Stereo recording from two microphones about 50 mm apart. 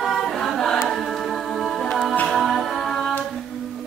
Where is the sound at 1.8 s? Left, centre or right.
Centre.